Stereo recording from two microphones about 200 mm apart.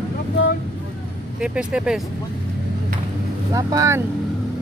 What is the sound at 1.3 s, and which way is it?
Speech, 5° right (ahead or behind).